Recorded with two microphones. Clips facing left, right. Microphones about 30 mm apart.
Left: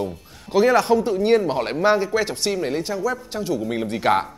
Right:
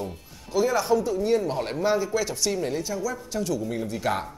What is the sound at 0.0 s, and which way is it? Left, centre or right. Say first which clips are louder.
Music: left 6 dB; left.